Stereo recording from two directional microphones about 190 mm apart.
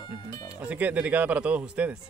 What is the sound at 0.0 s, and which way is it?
Music, 25° left (ahead or behind).